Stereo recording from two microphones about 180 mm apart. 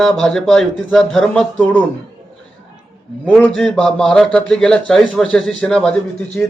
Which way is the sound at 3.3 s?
5° left (ahead or behind).